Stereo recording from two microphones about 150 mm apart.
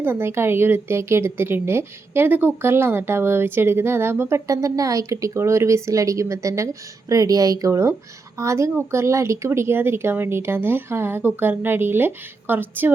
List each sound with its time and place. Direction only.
0.0 s a woman's voice: 15° right (ahead or behind)